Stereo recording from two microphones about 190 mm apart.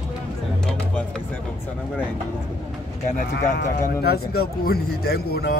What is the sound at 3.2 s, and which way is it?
A man's voice, 50° left (ahead or behind).